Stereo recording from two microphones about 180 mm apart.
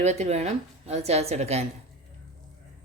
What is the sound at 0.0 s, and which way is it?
A woman's voice, 40° right (ahead or behind).